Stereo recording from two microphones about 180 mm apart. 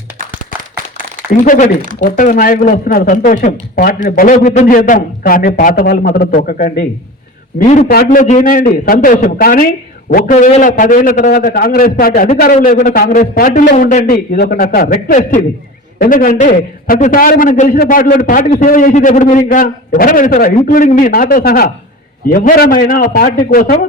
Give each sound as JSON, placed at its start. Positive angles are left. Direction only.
{"t": 1.5, "sound": "a man's voice", "side_deg": 50}
{"t": 7.9, "sound": "a man's voice", "side_deg": 55}